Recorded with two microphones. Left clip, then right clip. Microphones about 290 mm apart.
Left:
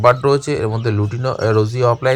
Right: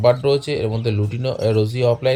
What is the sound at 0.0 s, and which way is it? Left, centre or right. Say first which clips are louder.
Speech: left 3 dB; left.